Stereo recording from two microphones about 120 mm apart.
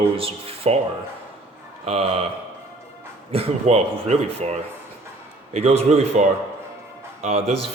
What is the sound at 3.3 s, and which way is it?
Speech, 60° right (ahead or behind).